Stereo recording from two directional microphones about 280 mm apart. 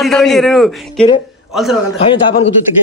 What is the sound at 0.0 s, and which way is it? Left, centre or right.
A man's voice, centre.